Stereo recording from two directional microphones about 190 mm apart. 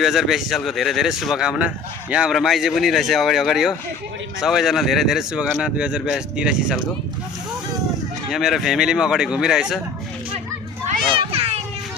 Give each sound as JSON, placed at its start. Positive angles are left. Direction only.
{"t": 0.0, "sound": "speech", "side_deg": 0}
{"t": 8.3, "sound": "speech", "side_deg": 0}
{"t": 11.1, "sound": "children playing", "side_deg": -30}